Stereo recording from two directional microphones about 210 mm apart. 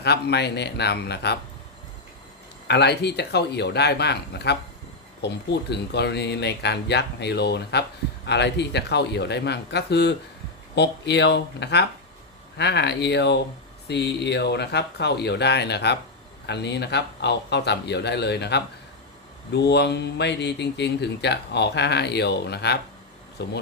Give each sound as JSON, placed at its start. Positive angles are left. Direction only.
{"t": 0.0, "sound": "speech", "side_deg": 50}
{"t": 2.6, "sound": "speech", "side_deg": 55}